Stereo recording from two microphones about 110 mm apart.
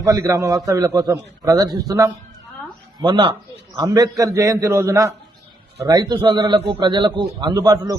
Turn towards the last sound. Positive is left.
turn(degrees=-35)  # may be behind; listen again after turning